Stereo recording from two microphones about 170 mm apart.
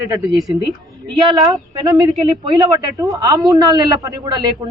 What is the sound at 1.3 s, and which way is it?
Speech, 25° right (ahead or behind).